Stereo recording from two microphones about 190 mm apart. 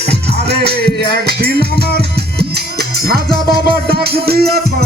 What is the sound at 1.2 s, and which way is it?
Music, 55° right (ahead or behind).